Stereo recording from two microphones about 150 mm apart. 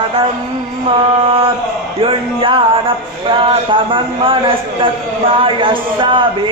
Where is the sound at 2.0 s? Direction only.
35° right (ahead or behind).